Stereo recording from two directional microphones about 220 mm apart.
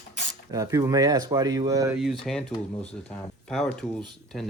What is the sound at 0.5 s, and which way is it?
Speech, 15° right (ahead or behind).